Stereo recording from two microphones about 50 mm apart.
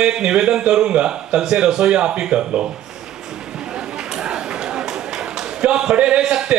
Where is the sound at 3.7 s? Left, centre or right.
Centre.